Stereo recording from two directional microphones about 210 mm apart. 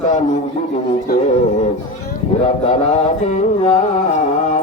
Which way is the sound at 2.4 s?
35° left (ahead or behind).